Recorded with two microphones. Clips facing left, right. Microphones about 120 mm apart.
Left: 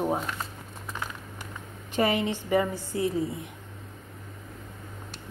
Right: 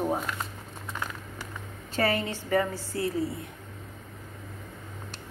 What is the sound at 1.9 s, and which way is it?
A woman's voice, 15° left (ahead or behind).